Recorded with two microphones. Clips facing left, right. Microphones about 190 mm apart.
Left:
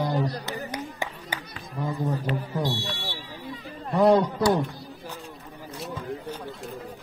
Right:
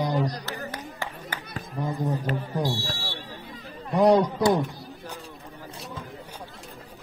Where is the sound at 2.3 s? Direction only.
45° right (ahead or behind).